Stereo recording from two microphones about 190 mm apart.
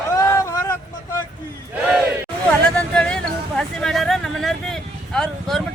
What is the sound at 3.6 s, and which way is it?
Vehicle, centre (ahead or behind).